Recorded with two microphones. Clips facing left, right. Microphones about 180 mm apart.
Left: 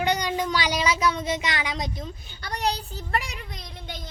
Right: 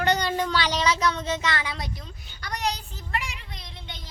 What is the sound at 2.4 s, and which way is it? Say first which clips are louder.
Speech: left 2 dB; 30° left (ahead or behind).